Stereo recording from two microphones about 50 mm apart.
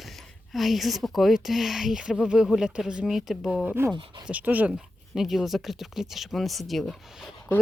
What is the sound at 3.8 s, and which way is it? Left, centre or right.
Speech, right.